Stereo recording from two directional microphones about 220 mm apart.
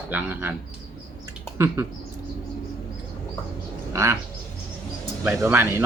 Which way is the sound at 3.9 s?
15° right (ahead or behind).